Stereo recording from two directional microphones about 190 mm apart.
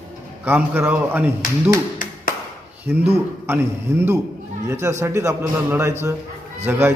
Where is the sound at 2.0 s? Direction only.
45° left (ahead or behind).